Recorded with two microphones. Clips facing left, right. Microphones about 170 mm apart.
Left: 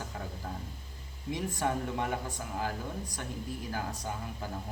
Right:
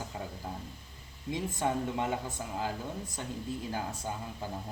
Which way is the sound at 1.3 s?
20° right (ahead or behind).